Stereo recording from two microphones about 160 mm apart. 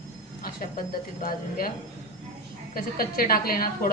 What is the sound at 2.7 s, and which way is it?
Speech, 65° left (ahead or behind).